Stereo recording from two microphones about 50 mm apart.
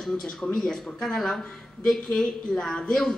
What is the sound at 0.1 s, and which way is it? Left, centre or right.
Speech, centre.